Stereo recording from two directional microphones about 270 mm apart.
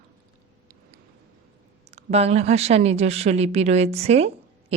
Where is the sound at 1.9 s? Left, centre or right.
Right.